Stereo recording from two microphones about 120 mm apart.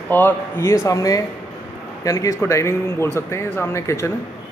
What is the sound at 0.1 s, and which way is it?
A man's voice, 15° left (ahead or behind).